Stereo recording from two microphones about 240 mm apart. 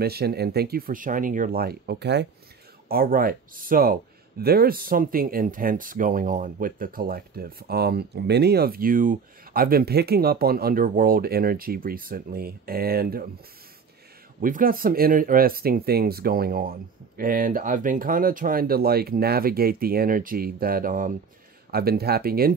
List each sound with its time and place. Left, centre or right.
0.0 s speech: right
14.4 s speech: right